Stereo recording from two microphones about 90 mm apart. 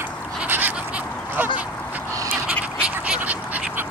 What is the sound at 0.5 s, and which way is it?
Bird, 20° right (ahead or behind).